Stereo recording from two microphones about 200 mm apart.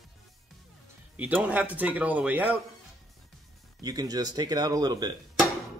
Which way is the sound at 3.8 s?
20° right (ahead or behind).